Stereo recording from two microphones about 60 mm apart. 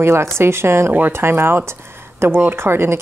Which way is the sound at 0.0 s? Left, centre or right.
Right.